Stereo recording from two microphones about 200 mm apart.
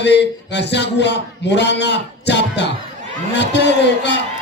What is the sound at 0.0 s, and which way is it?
A man's voice, 60° left (ahead or behind).